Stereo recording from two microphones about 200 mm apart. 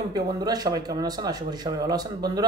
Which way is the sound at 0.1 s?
20° right (ahead or behind).